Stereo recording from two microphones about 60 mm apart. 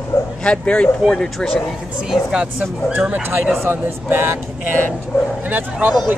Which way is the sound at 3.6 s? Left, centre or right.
Right.